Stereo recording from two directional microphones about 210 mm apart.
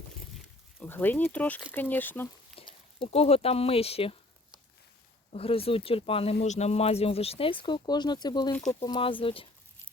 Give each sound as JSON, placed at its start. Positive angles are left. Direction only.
{"t": 0.8, "sound": "speech", "side_deg": 10}
{"t": 2.6, "sound": "speech", "side_deg": 25}
{"t": 5.3, "sound": "speech", "side_deg": 25}
{"t": 8.5, "sound": "speech", "side_deg": 5}
{"t": 8.8, "sound": "speech", "side_deg": 20}